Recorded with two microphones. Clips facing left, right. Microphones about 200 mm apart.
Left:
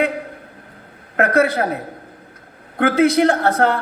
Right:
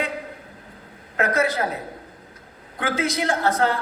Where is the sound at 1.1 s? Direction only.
60° left (ahead or behind).